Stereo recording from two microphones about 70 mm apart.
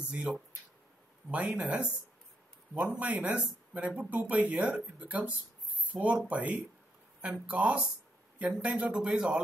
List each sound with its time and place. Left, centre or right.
0.1 s speech: centre